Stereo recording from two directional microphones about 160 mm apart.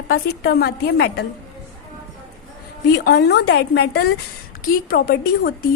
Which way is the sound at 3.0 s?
90° left.